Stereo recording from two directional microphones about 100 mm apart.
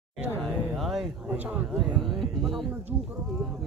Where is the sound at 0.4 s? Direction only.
Centre (ahead or behind).